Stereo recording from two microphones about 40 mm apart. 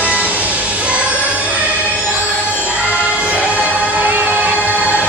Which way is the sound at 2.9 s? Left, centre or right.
Right.